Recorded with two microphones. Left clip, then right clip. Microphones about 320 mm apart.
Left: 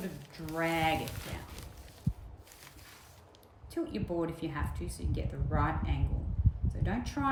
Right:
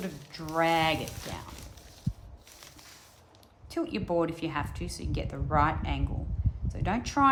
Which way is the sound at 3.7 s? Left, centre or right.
Centre.